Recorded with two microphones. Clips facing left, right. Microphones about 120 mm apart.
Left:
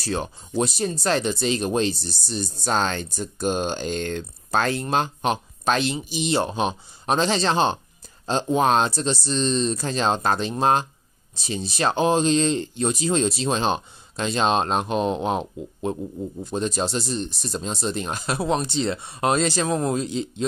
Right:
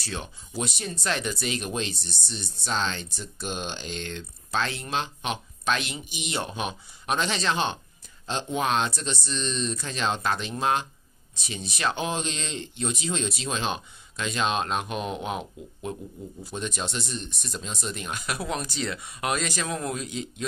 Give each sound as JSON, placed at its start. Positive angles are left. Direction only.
{"t": 0.0, "sound": "speech", "side_deg": 40}